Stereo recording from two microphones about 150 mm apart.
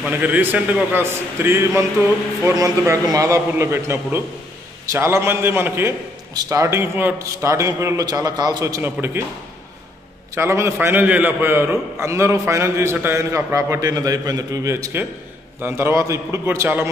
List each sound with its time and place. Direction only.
0.0 s a man's voice: 10° right (ahead or behind)
10.3 s a man's voice: 15° right (ahead or behind)